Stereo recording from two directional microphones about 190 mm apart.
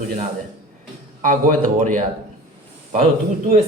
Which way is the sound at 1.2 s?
45° right (ahead or behind).